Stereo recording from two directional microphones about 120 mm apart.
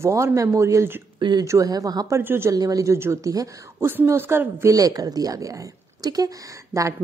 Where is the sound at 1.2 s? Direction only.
40° right (ahead or behind).